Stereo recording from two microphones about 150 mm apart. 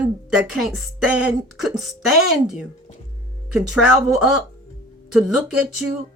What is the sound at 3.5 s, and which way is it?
Speech, 5° right (ahead or behind).